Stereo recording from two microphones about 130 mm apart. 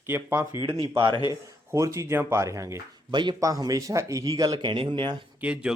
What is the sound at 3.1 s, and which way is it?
A man's voice, 35° right (ahead or behind).